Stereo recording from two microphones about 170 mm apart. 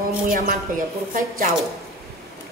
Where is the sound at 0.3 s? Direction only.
50° right (ahead or behind).